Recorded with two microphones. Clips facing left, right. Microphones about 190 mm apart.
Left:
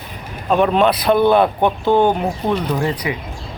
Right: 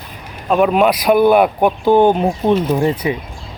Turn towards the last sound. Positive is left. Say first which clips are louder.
# right 4 dB
turn(degrees=-25)  # may be behind; listen again after turning